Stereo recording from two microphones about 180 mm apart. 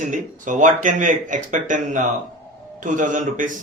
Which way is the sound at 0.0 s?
45° right (ahead or behind).